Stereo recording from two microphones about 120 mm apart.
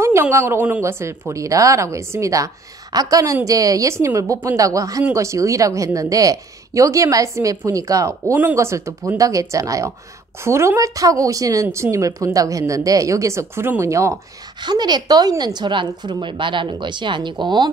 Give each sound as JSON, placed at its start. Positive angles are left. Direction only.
{"t": 0.0, "sound": "a woman's voice", "side_deg": -20}
{"t": 14.6, "sound": "a woman's voice", "side_deg": -35}